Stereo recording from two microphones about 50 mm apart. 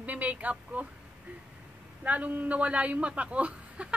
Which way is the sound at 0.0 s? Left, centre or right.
Right.